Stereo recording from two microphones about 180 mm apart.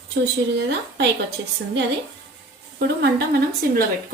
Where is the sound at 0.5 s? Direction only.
75° right (ahead or behind).